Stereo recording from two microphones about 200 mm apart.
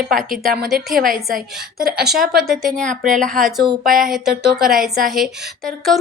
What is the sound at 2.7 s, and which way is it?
Speech, 40° right (ahead or behind).